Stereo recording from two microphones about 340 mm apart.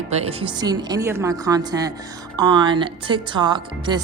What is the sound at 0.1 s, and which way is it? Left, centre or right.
A woman's voice, centre.